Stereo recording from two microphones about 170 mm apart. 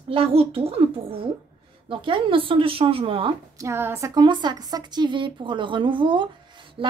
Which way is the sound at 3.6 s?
15° right (ahead or behind).